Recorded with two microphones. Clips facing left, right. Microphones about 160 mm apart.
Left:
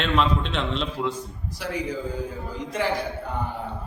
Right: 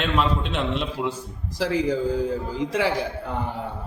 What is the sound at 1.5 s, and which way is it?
Speech, 90° right.